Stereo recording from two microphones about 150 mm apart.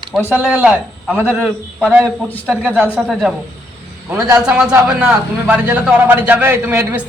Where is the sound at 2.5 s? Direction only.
10° right (ahead or behind).